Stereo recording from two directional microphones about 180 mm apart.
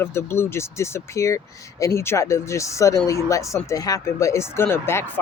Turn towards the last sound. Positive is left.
turn(degrees=10)  # may be behind; listen again after turning